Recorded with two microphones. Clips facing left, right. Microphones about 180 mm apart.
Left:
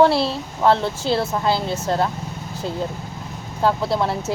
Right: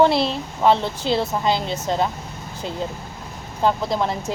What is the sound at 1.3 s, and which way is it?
Speech, 5° right (ahead or behind).